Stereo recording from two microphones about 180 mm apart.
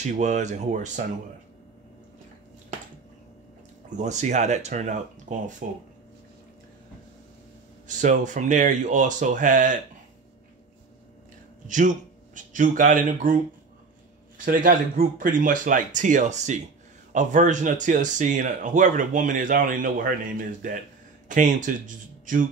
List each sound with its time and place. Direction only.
0.0 s speech: 40° right (ahead or behind)
3.9 s speech: 40° right (ahead or behind)
7.9 s speech: 45° right (ahead or behind)
11.6 s speech: 45° right (ahead or behind)
14.4 s speech: 50° right (ahead or behind)